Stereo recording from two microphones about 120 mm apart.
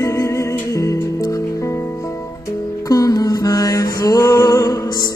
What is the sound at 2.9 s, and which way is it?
Music, 30° left (ahead or behind).